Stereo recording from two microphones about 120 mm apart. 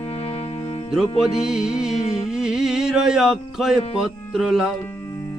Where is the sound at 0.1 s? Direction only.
60° left (ahead or behind).